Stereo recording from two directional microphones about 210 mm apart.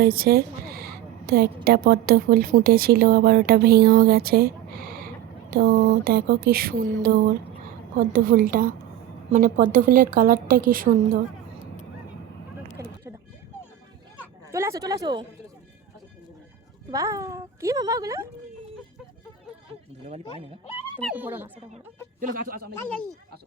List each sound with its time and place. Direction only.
0.0 s a sound: 45° right (ahead or behind)
1.6 s a woman's voice: 45° right (ahead or behind)
14.5 s a woman's voice: 15° right (ahead or behind)
16.9 s a woman's voice: 15° right (ahead or behind)
21.0 s a woman's voice: 5° right (ahead or behind)
22.2 s a woman's voice: 40° right (ahead or behind)